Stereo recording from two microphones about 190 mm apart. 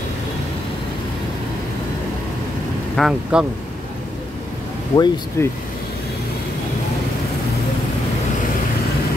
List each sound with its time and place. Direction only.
3.0 s speech: 5° right (ahead or behind)
4.9 s speech: 20° left (ahead or behind)